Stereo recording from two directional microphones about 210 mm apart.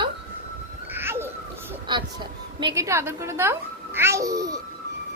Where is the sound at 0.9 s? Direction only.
10° right (ahead or behind).